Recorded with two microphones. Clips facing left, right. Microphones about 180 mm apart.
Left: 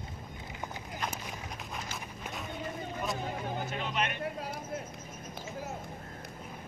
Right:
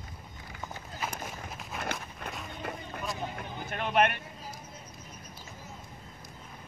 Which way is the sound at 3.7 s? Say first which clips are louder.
Right 12 dB; 60° right (ahead or behind).